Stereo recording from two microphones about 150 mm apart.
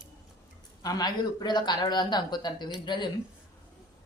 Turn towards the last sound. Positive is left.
turn(degrees=30)  # may be behind; listen again after turning